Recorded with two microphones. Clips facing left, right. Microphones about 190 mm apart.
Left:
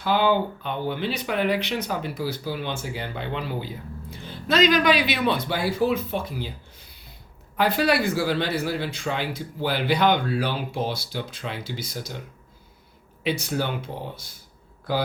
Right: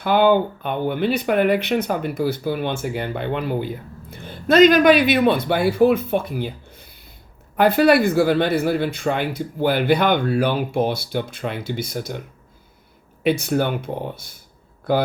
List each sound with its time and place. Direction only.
0.0 s speech: 55° right (ahead or behind)
13.4 s speech: 55° right (ahead or behind)